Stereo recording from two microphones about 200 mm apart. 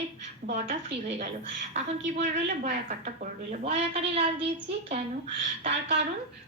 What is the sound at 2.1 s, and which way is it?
A woman's voice, 35° right (ahead or behind).